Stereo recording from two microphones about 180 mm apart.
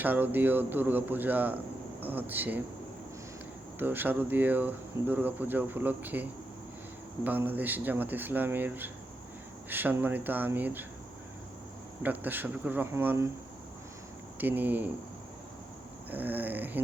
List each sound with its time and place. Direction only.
0.0 s speech: 10° right (ahead or behind)
3.8 s speech: 10° right (ahead or behind)
7.3 s speech: 10° right (ahead or behind)
12.0 s speech: 10° right (ahead or behind)
14.3 s speech: 10° right (ahead or behind)
16.0 s speech: 10° right (ahead or behind)